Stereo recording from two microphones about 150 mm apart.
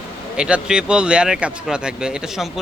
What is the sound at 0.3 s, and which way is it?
A man's voice, 5° right (ahead or behind).